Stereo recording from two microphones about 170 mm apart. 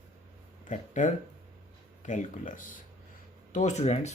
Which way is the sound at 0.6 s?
45° left (ahead or behind).